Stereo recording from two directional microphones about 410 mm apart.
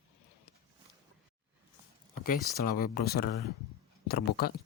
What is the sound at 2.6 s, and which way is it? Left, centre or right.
Speech, left.